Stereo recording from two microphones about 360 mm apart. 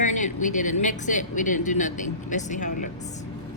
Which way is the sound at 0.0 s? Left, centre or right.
Left.